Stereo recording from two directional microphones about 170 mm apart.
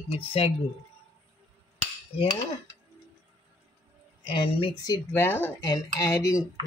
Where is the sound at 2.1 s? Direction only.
25° left (ahead or behind).